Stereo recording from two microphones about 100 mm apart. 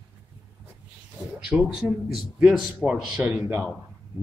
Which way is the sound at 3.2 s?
15° right (ahead or behind).